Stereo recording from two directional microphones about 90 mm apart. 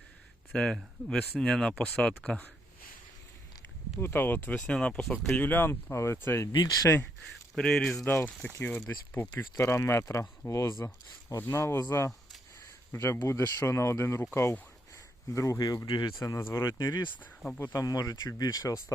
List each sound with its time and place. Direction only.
0.5 s speech: 5° left (ahead or behind)
4.0 s speech: 25° left (ahead or behind)
6.5 s speech: 55° left (ahead or behind)
7.5 s speech: 5° left (ahead or behind)
8.0 s speech: 20° left (ahead or behind)
15.3 s speech: 35° left (ahead or behind)
17.6 s speech: 30° left (ahead or behind)
17.8 s speech: 45° left (ahead or behind)